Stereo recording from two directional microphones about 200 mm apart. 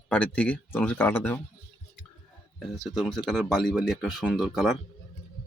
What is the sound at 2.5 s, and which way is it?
Speech, centre (ahead or behind).